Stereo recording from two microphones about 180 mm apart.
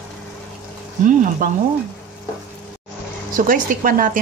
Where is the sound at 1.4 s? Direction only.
55° right (ahead or behind).